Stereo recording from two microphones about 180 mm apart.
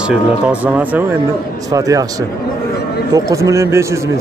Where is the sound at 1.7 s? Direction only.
20° right (ahead or behind).